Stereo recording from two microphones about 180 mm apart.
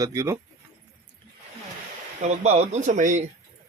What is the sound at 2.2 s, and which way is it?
Speech, 40° right (ahead or behind).